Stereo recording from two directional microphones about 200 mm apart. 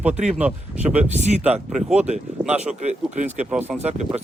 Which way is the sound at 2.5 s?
35° right (ahead or behind).